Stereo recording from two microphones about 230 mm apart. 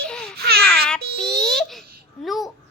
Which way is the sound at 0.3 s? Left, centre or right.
Right.